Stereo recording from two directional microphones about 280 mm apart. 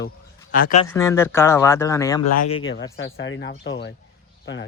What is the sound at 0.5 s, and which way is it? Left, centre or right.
Speech, left.